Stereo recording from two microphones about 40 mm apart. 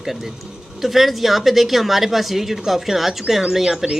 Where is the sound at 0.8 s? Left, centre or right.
Centre.